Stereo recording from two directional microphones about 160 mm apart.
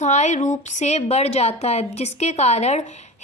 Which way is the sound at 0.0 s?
45° left (ahead or behind).